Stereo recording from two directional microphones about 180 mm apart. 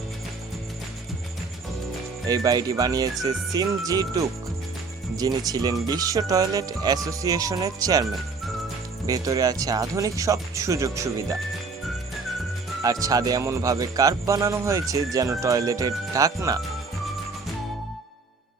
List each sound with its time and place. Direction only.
2.2 s speech: 20° right (ahead or behind)
9.0 s speech: 20° right (ahead or behind)
12.8 s speech: 20° right (ahead or behind)